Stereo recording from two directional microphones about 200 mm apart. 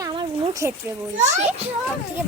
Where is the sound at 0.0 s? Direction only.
20° right (ahead or behind).